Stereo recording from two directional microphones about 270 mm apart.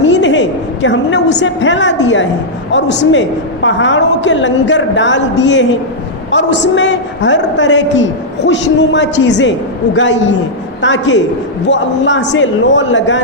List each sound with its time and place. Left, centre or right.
0.0 s a woman's voice: left